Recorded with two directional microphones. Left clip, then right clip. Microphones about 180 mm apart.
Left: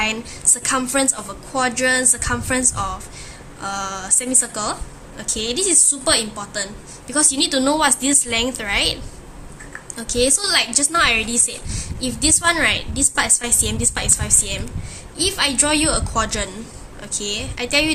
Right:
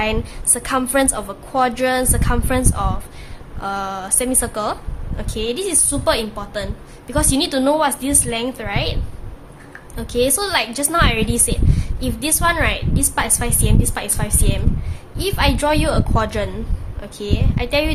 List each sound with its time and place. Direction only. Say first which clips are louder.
0.0 s a woman's voice: even; 35° right (ahead or behind); by 9.0 s 15° right (ahead or behind)
10.0 s a woman's voice: right 1 dB; 30° right (ahead or behind)